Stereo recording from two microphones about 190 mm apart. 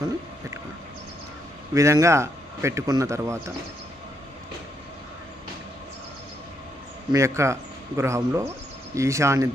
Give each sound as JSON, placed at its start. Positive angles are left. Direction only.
{"t": 1.7, "sound": "speech", "side_deg": -15}
{"t": 7.1, "sound": "speech", "side_deg": -15}